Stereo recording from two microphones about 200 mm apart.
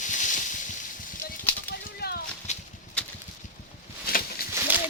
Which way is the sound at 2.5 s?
35° left (ahead or behind).